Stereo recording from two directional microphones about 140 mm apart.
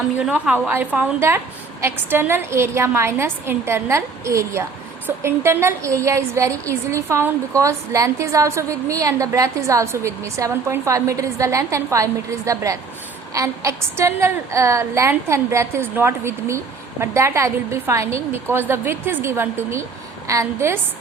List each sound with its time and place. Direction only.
0.2 s a woman's voice: 5° right (ahead or behind)